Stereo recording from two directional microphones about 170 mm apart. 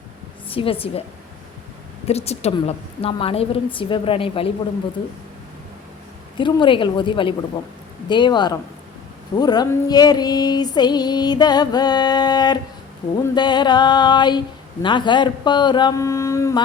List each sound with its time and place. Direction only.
0.5 s a woman's voice: 35° left (ahead or behind)
2.0 s a woman's voice: 40° left (ahead or behind)
6.3 s speech: 30° left (ahead or behind)